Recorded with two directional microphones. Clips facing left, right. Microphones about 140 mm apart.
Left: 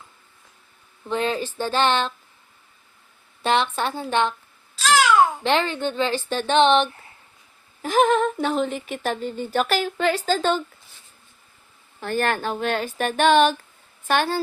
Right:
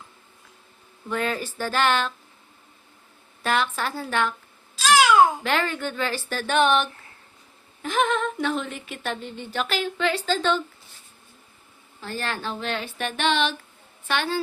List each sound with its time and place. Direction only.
1.0 s a woman's voice: 25° left (ahead or behind)
3.4 s a woman's voice: 25° left (ahead or behind)
5.4 s a woman's voice: 25° left (ahead or behind)
7.8 s speech: 40° left (ahead or behind)
11.9 s speech: 55° left (ahead or behind)